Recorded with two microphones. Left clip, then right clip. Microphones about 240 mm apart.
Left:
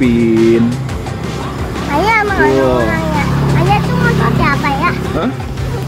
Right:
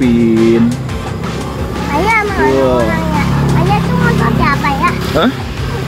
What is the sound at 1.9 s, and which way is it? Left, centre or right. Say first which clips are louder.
Music: left 1 dB; left.